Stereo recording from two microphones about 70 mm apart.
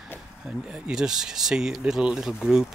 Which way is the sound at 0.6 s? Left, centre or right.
Centre.